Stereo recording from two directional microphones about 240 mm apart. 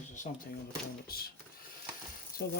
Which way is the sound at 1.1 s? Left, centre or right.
Left.